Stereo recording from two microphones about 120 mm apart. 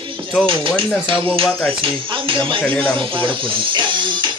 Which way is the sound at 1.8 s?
45° right (ahead or behind).